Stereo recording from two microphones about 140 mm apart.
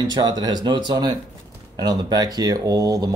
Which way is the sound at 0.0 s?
30° right (ahead or behind).